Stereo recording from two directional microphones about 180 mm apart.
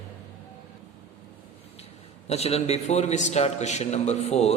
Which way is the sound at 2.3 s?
35° left (ahead or behind).